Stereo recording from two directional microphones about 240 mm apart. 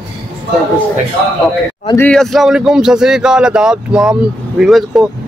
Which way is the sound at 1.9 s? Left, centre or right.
Centre.